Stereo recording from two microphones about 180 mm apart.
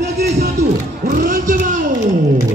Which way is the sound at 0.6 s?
40° right (ahead or behind).